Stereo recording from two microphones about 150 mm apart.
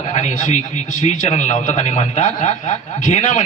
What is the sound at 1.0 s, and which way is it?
A man's voice, 50° left (ahead or behind).